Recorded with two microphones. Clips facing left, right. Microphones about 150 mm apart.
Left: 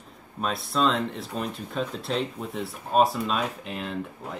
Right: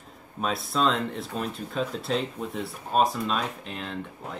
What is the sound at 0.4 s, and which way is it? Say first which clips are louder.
Speech: left 1 dB; centre (ahead or behind).